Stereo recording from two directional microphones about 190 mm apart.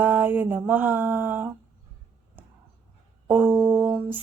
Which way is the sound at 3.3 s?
10° right (ahead or behind).